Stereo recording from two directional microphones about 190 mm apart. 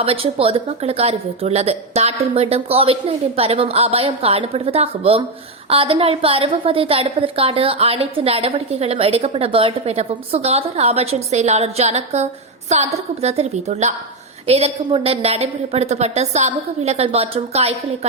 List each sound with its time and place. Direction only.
0.0 s a woman's voice: 30° right (ahead or behind)